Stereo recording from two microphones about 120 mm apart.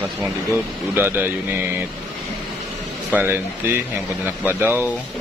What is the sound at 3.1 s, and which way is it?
Speech, 15° right (ahead or behind).